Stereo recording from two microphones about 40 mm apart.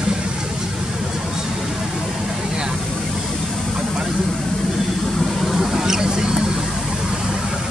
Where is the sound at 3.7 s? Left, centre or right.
Centre.